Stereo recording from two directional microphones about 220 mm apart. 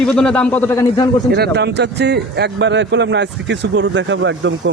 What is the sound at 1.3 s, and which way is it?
A man's voice, 50° right (ahead or behind).